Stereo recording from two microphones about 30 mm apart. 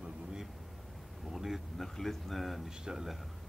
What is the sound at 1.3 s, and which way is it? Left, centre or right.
Speech, centre.